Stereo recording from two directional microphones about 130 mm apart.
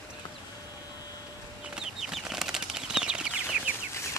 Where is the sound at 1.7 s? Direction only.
5° right (ahead or behind).